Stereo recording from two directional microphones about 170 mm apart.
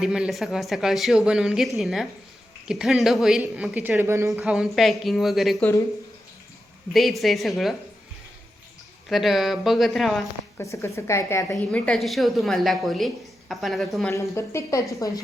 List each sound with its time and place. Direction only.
0.0 s a woman's voice: 5° right (ahead or behind)
4.4 s a woman's voice: centre (ahead or behind)
6.9 s a woman's voice: centre (ahead or behind)
9.0 s a woman's voice: centre (ahead or behind)
10.6 s speech: 15° left (ahead or behind)
11.7 s a woman's voice: 5° left (ahead or behind)
14.1 s speech: 15° left (ahead or behind)